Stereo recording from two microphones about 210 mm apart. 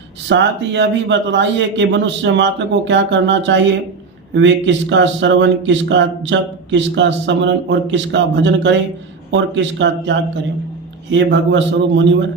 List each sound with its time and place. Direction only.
0.3 s speech: 55° right (ahead or behind)